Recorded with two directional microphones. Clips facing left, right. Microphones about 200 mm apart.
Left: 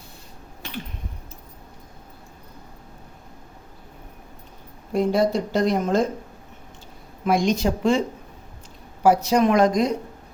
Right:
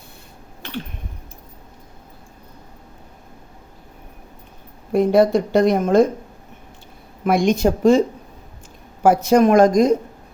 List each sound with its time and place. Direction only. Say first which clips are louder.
4.9 s speech: right 6 dB; 60° right (ahead or behind)
7.3 s speech: right 4 dB; 55° right (ahead or behind)
9.0 s speech: right 4 dB; 50° right (ahead or behind)